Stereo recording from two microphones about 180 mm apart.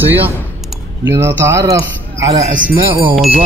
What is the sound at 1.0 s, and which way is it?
A man's voice, 15° right (ahead or behind).